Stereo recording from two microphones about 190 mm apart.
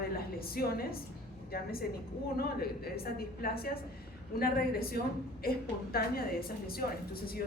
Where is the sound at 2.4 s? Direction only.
55° left (ahead or behind).